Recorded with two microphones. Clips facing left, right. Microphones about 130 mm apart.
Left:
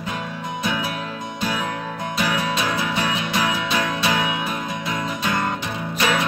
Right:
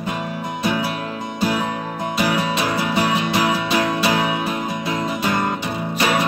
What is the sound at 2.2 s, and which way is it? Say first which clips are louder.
Music: right 3 dB; 10° right (ahead or behind).